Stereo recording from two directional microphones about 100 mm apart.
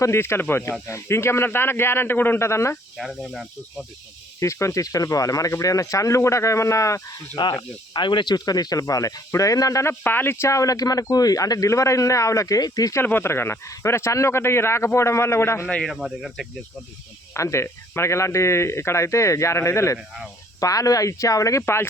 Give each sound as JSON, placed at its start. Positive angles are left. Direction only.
{"t": 0.0, "sound": "speech", "side_deg": 25}
{"t": 3.0, "sound": "speech", "side_deg": 0}
{"t": 4.4, "sound": "speech", "side_deg": 30}
{"t": 7.5, "sound": "speech", "side_deg": 50}
{"t": 10.0, "sound": "speech", "side_deg": 20}
{"t": 13.0, "sound": "speech", "side_deg": 20}
{"t": 15.9, "sound": "speech", "side_deg": 0}
{"t": 17.3, "sound": "speech", "side_deg": 30}
{"t": 20.0, "sound": "speech", "side_deg": -10}
{"t": 20.6, "sound": "speech", "side_deg": 35}